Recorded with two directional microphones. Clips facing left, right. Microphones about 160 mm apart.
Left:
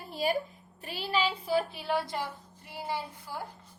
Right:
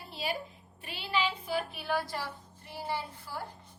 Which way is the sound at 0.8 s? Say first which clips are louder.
Left 2 dB; 40° left (ahead or behind).